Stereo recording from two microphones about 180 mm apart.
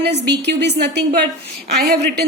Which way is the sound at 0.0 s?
70° right (ahead or behind).